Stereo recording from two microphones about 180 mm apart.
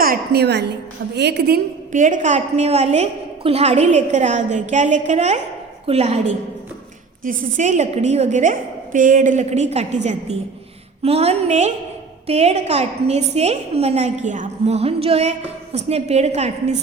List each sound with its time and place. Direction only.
0.0 s a woman's voice: 60° right (ahead or behind)
1.9 s a woman's voice: 45° right (ahead or behind)